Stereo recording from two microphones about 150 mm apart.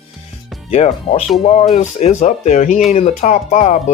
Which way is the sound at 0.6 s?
45° left (ahead or behind).